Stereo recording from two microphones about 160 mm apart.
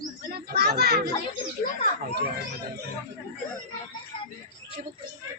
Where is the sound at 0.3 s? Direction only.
85° right.